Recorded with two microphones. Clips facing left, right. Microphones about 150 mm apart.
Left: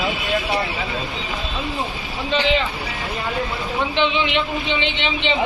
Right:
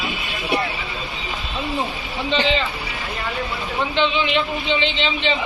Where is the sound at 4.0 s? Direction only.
15° left (ahead or behind).